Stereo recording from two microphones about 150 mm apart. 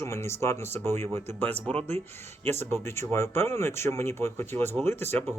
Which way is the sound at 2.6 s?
15° left (ahead or behind).